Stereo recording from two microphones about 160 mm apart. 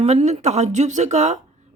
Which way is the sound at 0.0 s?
45° right (ahead or behind).